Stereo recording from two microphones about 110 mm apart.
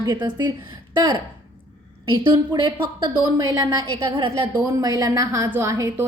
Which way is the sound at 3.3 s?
35° right (ahead or behind).